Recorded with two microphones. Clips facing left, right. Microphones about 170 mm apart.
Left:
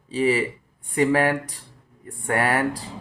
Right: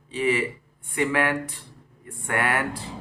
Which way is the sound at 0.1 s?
35° left (ahead or behind).